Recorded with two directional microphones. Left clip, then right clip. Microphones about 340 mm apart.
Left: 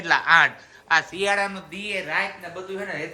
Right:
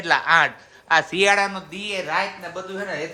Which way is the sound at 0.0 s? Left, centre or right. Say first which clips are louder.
Even; centre.